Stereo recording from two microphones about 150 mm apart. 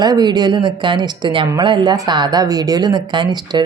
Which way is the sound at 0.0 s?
25° right (ahead or behind).